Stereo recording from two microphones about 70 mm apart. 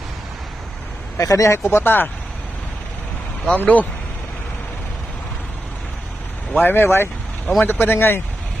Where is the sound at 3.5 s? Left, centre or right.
Left.